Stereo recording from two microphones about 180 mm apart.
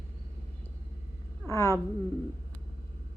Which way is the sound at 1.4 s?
15° left (ahead or behind).